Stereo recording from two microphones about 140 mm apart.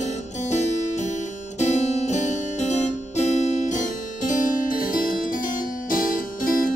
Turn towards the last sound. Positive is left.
turn(degrees=75)  # may be behind; listen again after turning